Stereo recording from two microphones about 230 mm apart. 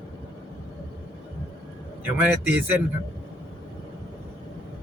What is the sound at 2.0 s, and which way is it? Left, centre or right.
Speech, centre.